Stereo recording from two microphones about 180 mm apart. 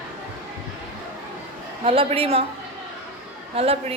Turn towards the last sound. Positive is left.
turn(degrees=-35)  # may be behind; listen again after turning